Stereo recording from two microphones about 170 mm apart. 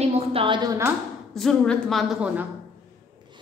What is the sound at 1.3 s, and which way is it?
A woman's voice, 5° left (ahead or behind).